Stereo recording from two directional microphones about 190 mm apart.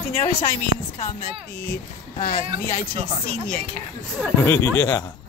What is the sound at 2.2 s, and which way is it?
Speech, 45° left (ahead or behind).